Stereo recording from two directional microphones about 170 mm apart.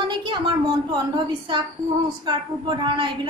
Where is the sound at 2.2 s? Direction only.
30° right (ahead or behind).